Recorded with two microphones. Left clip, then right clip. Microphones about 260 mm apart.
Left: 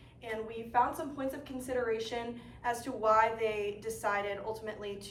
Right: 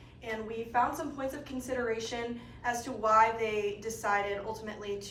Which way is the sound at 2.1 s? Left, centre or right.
Left.